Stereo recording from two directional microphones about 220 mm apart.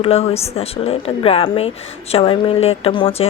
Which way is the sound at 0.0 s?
25° left (ahead or behind).